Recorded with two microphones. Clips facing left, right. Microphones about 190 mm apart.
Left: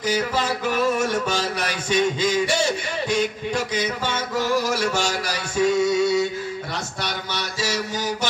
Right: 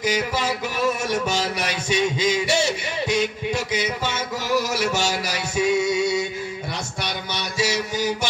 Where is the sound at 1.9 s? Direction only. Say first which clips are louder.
Left 1 dB; 10° right (ahead or behind).